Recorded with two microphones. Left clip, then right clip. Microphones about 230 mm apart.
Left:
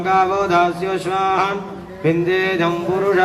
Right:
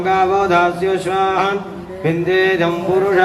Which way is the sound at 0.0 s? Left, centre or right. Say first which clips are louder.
Right 2 dB; left.